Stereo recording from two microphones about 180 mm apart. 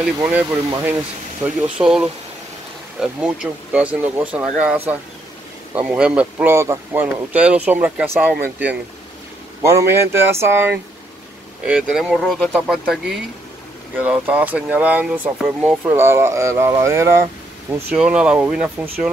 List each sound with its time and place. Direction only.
0.2 s speech: 10° right (ahead or behind)
11.6 s speech: 5° right (ahead or behind)